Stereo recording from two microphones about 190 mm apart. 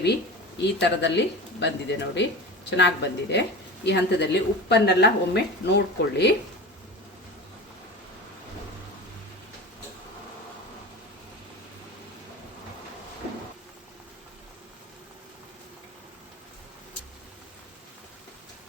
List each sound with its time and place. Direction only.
0.6 s a woman's voice: 65° left (ahead or behind)